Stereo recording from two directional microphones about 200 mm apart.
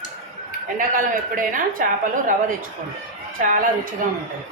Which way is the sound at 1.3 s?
45° right (ahead or behind).